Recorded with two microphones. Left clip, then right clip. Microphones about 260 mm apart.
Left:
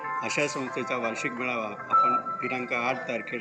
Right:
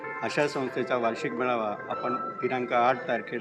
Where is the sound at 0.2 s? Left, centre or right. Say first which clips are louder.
Right 3 dB; centre.